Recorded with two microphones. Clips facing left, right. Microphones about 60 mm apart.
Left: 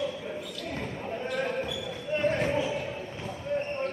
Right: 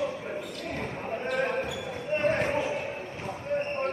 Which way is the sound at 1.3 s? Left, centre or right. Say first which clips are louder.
Right 2 dB; right.